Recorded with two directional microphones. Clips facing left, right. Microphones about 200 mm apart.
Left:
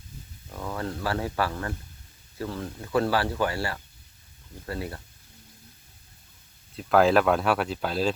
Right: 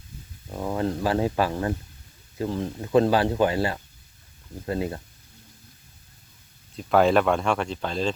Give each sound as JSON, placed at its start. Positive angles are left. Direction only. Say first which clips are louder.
{"t": 0.5, "sound": "speech", "louder": "right 6 dB", "side_deg": -25}
{"t": 6.7, "sound": "speech", "louder": "right 1 dB", "side_deg": 0}